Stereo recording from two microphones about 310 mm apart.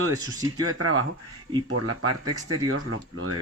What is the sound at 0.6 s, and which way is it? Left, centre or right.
Speech, right.